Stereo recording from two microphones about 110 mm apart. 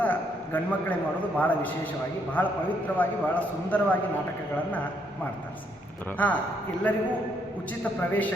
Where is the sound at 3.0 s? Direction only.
15° left (ahead or behind).